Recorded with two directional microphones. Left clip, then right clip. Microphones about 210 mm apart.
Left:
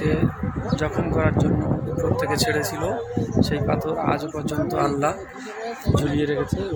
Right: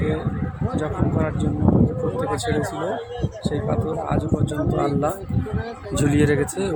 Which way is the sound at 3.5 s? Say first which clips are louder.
Left 1 dB; 15° left (ahead or behind).